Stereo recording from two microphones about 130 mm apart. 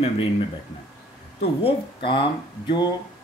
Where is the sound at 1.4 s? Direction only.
45° left (ahead or behind).